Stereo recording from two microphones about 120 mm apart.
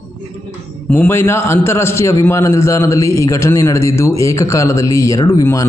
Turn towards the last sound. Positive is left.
turn(degrees=25)  # may be behind; listen again after turning